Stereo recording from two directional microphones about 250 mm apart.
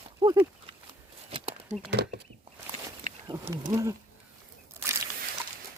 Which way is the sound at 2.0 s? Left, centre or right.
Right.